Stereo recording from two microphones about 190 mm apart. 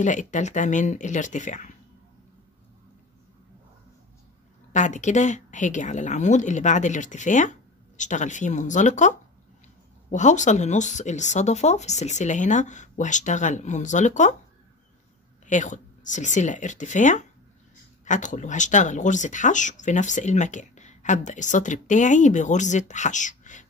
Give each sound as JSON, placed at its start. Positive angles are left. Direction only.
{"t": 0.0, "sound": "speech", "side_deg": 40}
{"t": 4.7, "sound": "speech", "side_deg": 40}
{"t": 10.1, "sound": "speech", "side_deg": 40}
{"t": 15.4, "sound": "speech", "side_deg": 40}